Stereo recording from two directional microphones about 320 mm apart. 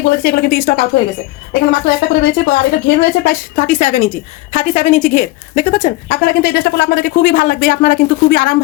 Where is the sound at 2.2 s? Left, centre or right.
Left.